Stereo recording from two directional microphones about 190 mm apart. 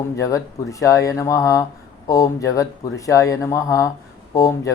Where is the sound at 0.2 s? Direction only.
15° left (ahead or behind).